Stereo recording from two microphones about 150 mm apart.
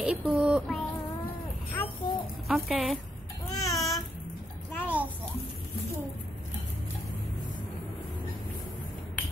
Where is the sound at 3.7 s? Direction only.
20° left (ahead or behind).